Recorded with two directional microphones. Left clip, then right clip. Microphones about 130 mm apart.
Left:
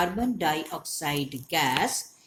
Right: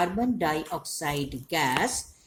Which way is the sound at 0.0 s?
45° right (ahead or behind).